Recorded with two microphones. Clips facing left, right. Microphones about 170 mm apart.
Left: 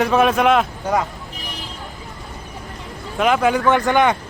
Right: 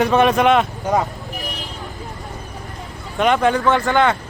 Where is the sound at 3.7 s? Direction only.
15° left (ahead or behind).